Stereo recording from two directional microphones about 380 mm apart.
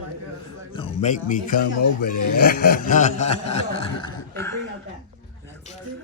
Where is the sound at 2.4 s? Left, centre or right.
Left.